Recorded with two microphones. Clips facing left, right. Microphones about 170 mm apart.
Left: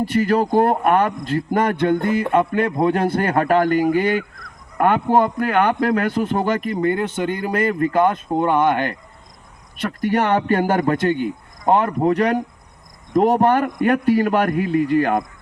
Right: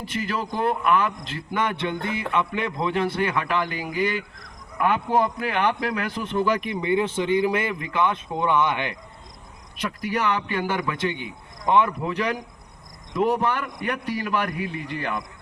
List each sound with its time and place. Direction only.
0.1 s a man's voice: 50° left (ahead or behind)
10.2 s a man's voice: 50° left (ahead or behind)
13.1 s a man's voice: 40° left (ahead or behind)